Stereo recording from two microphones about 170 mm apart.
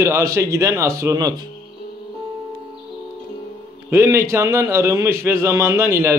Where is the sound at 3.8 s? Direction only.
15° right (ahead or behind).